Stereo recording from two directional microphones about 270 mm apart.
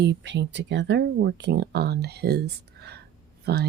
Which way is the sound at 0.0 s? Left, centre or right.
Right.